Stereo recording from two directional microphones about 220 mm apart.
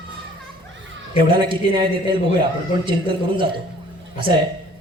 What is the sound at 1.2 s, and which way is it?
Music, 20° right (ahead or behind).